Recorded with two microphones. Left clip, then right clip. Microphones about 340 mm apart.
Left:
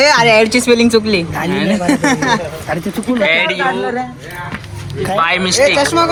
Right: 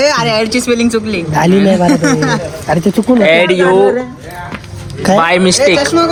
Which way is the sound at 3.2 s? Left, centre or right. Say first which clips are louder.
Right 3 dB; centre.